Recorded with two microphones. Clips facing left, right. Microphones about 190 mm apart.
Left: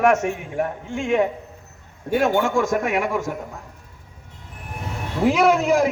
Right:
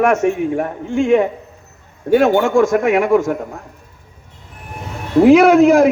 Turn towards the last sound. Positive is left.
turn(degrees=-65)  # may be behind; listen again after turning